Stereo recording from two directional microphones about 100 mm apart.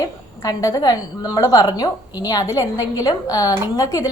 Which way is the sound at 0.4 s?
35° left (ahead or behind).